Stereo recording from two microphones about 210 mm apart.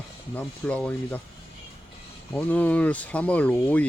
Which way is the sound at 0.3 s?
5° left (ahead or behind).